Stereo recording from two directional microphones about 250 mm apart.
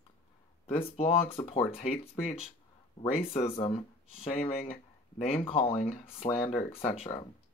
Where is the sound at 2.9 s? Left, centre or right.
Left.